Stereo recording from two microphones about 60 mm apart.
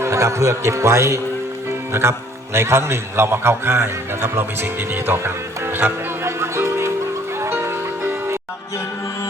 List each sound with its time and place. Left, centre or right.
0.0 s a man's voice: right
7.5 s music: right